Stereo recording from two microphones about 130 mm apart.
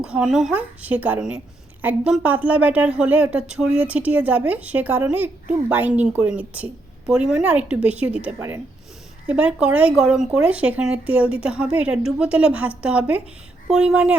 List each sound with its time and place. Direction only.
0.0 s speech: 5° right (ahead or behind)
8.4 s speech: 20° right (ahead or behind)